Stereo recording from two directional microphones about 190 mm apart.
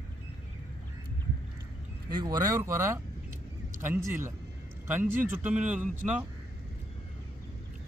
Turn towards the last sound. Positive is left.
turn(degrees=-10)  # may be behind; listen again after turning